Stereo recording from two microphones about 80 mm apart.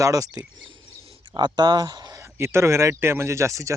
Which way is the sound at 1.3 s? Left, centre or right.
Right.